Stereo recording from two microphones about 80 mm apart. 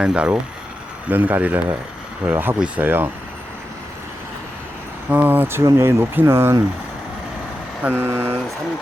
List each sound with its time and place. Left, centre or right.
0.0 s speech: centre
5.0 s speech: right
7.8 s speech: right